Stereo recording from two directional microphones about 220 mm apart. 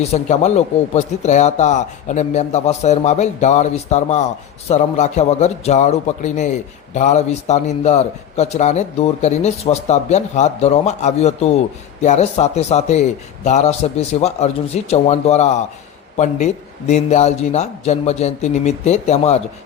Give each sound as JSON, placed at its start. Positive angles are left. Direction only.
{"t": 0.0, "sound": "a man's voice", "side_deg": 30}